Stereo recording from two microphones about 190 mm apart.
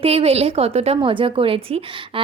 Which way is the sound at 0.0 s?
30° right (ahead or behind).